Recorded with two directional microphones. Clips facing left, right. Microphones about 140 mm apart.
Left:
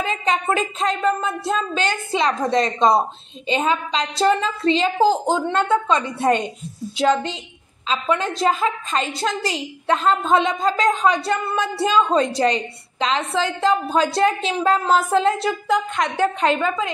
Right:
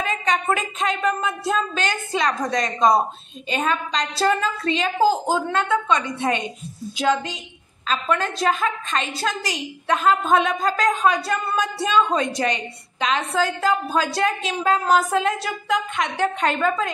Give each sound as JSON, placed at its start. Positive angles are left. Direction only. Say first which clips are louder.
{"t": 0.0, "sound": "a woman's voice", "louder": "left 1 dB", "side_deg": 30}
{"t": 7.0, "sound": "a woman's voice", "louder": "left 3 dB", "side_deg": 25}